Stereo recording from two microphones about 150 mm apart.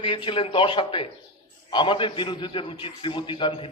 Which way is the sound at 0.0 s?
35° left (ahead or behind).